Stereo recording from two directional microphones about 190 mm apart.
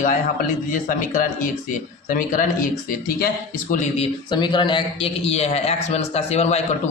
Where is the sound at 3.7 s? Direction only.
40° left (ahead or behind).